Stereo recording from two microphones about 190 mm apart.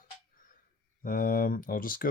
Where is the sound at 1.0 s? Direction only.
50° left (ahead or behind).